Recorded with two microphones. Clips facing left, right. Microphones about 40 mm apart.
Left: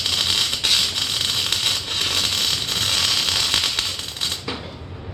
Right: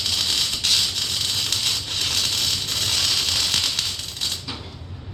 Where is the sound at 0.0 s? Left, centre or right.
Centre.